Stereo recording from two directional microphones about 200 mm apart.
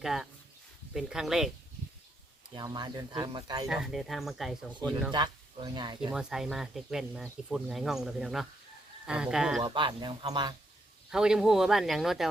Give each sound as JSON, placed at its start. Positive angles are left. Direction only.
{"t": 0.0, "sound": "speech", "side_deg": 0}
{"t": 2.6, "sound": "speech", "side_deg": -20}
{"t": 3.7, "sound": "speech", "side_deg": 0}
{"t": 5.1, "sound": "speech", "side_deg": -20}
{"t": 6.1, "sound": "speech", "side_deg": -5}
{"t": 9.6, "sound": "speech", "side_deg": -25}
{"t": 11.1, "sound": "speech", "side_deg": -5}